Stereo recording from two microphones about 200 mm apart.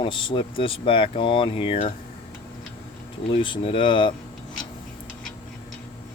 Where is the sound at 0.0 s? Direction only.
25° left (ahead or behind).